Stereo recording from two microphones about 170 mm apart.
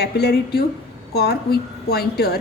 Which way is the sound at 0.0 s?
75° left (ahead or behind).